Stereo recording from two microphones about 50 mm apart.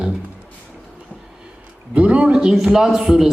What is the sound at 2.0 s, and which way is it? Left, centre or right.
A man's voice, right.